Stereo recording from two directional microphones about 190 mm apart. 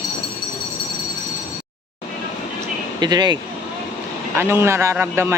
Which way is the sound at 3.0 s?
20° right (ahead or behind).